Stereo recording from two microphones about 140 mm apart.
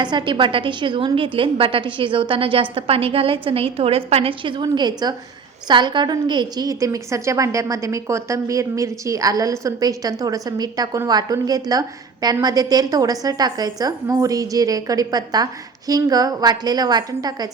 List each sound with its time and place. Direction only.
0.0 s a woman's voice: 30° right (ahead or behind)